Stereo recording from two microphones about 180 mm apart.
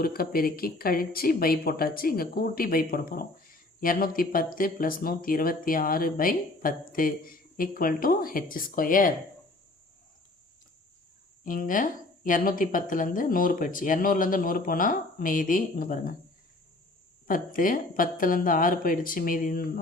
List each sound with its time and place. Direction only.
0.0 s speech: 55° left (ahead or behind)
11.4 s speech: 50° left (ahead or behind)
17.2 s speech: 50° left (ahead or behind)